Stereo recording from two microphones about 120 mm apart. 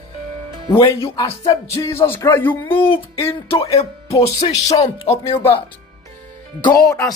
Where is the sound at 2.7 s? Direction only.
50° left (ahead or behind).